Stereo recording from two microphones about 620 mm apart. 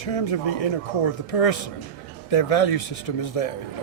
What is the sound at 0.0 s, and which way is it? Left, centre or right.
A man's voice, left.